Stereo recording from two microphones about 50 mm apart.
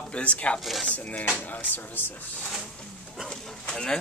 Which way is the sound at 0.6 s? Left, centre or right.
Centre.